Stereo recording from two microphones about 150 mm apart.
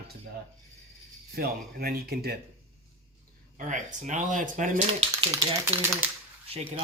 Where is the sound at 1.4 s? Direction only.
90° right.